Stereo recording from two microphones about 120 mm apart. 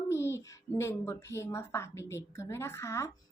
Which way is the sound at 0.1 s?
20° left (ahead or behind).